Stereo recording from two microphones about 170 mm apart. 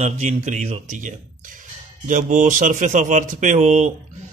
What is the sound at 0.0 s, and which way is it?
A man's voice, 45° right (ahead or behind).